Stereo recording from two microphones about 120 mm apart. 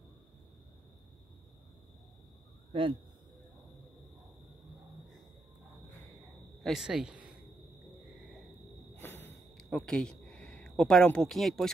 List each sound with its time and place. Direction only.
2.7 s speech: 45° right (ahead or behind)
6.6 s speech: 5° right (ahead or behind)
9.0 s a sound: 15° left (ahead or behind)
9.6 s speech: 5° left (ahead or behind)